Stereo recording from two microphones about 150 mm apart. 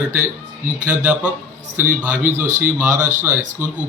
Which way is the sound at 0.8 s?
10° right (ahead or behind).